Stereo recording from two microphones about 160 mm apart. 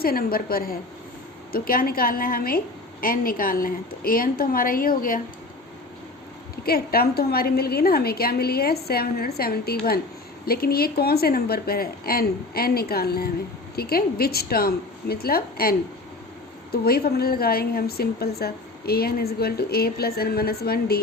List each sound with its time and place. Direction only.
0.0 s a woman's voice: 70° left (ahead or behind)
6.7 s a woman's voice: 70° left (ahead or behind)
16.7 s a woman's voice: 75° left (ahead or behind)